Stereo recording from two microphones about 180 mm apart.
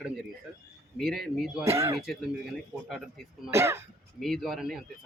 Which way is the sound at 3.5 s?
15° right (ahead or behind).